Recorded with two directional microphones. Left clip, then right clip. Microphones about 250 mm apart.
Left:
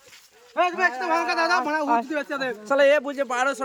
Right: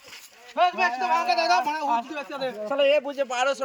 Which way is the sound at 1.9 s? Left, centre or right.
Left.